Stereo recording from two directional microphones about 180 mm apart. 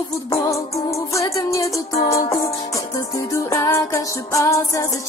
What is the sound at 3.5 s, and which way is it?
Music, 15° left (ahead or behind).